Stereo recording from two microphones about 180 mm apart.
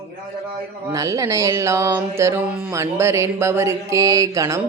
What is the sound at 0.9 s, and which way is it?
Music, 15° right (ahead or behind).